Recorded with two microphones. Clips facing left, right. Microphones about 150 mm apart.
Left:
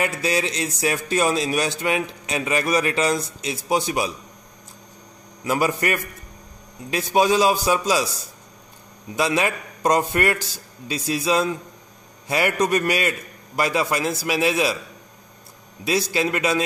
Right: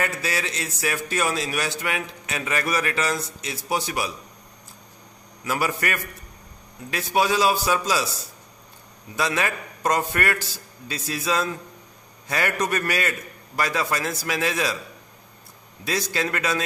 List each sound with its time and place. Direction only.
0.0 s a man's voice: 20° left (ahead or behind)
5.4 s a man's voice: 20° left (ahead or behind)
9.1 s a man's voice: 15° left (ahead or behind)
15.8 s a man's voice: 10° left (ahead or behind)